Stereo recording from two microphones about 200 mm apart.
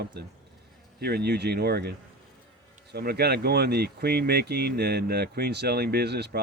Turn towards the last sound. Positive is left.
turn(degrees=-55)  # may be behind; listen again after turning